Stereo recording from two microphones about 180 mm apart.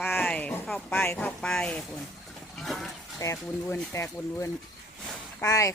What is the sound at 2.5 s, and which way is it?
Sheep, centre (ahead or behind).